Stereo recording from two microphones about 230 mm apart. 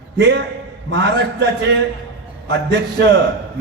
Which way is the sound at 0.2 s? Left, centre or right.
Right.